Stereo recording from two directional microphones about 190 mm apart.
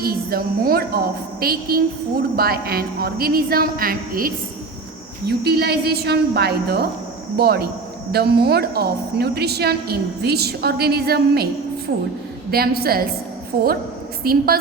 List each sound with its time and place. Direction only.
0.0 s a woman's voice: 50° right (ahead or behind)
12.5 s a woman's voice: 55° right (ahead or behind)
14.3 s a woman's voice: 50° right (ahead or behind)